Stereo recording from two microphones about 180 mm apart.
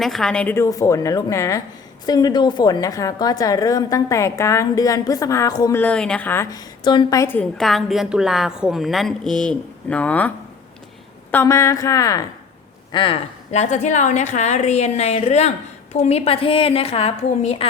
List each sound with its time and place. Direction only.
0.0 s a woman's voice: centre (ahead or behind); by 5.8 s 20° left (ahead or behind)
5.8 s a woman's voice: 5° left (ahead or behind)
6.8 s a woman's voice: 25° left (ahead or behind)
7.6 s a woman's voice: centre (ahead or behind); by 13.1 s 25° left (ahead or behind)
13.5 s a woman's voice: 40° left (ahead or behind)